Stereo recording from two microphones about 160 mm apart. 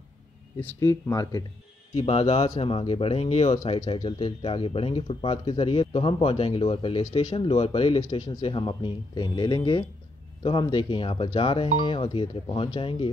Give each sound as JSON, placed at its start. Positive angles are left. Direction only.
{"t": 0.7, "sound": "speech", "side_deg": 20}
{"t": 2.0, "sound": "speech", "side_deg": 40}